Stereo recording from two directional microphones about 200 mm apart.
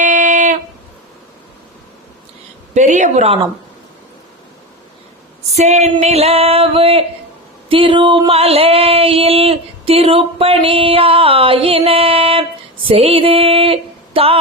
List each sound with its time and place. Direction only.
0.0 s music: 40° right (ahead or behind)
2.7 s female singing: 35° right (ahead or behind)
5.5 s female singing: 35° right (ahead or behind)
7.7 s a sound: 25° right (ahead or behind)
12.9 s female singing: 30° right (ahead or behind)